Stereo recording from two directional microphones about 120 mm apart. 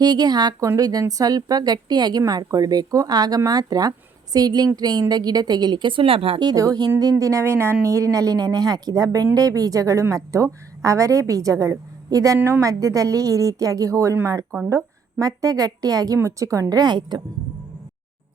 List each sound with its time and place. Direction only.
0.0 s a woman's voice: 35° right (ahead or behind); by 6.5 s 50° right (ahead or behind)
6.5 s a woman's voice: 30° right (ahead or behind)